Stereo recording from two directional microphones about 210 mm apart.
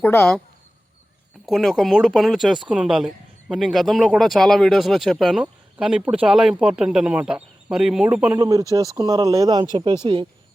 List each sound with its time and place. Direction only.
0.0 s speech: 10° left (ahead or behind)
1.5 s speech: centre (ahead or behind)
8.4 s speech: 15° right (ahead or behind)